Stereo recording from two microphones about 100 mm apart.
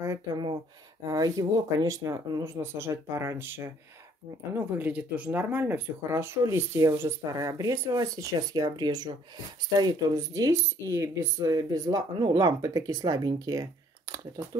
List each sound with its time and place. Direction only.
0.3 s speech: 45° right (ahead or behind)
1.0 s speech: 35° right (ahead or behind)
11.5 s speech: 40° right (ahead or behind)